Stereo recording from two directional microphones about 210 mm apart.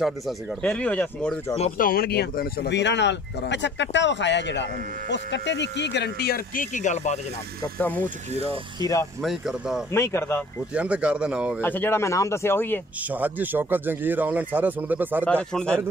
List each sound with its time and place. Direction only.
0.6 s speech: 5° left (ahead or behind)
1.8 s speech: 45° left (ahead or behind)
7.6 s speech: 10° left (ahead or behind)
9.2 s speech: centre (ahead or behind)
9.9 s speech: 10° left (ahead or behind)
10.7 s speech: 5° right (ahead or behind)
11.6 s speech: 10° left (ahead or behind)
13.1 s speech: 10° right (ahead or behind)
15.2 s speech: 5° left (ahead or behind)